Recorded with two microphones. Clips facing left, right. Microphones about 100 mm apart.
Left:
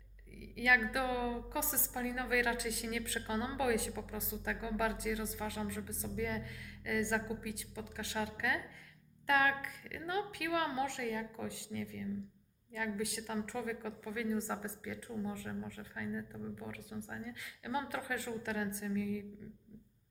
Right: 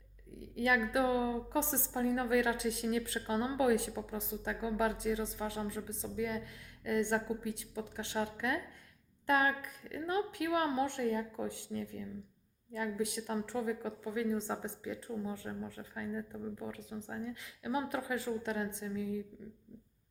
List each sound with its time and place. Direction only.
0.3 s a woman's voice: 30° right (ahead or behind)